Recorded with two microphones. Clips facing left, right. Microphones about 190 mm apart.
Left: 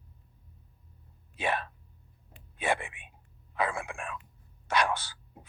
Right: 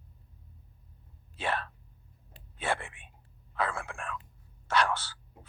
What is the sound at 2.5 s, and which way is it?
Whispering, 15° left (ahead or behind).